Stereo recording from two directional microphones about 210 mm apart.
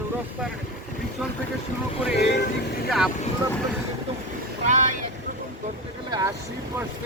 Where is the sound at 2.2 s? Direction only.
55° left (ahead or behind).